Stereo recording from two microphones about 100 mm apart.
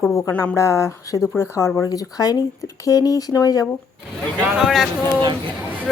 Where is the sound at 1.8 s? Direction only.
40° left (ahead or behind).